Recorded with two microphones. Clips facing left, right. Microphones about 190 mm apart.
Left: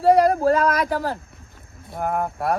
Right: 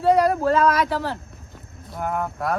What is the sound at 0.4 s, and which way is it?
Speech, 45° left (ahead or behind).